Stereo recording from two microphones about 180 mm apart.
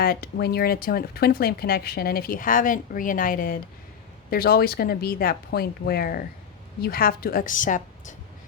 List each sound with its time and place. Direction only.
0.0 s a woman's voice: 60° left (ahead or behind)